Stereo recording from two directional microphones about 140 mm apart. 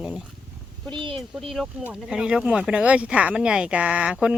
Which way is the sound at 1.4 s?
Centre (ahead or behind).